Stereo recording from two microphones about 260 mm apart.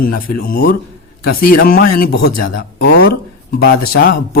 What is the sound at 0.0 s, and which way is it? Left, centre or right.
Speech, left.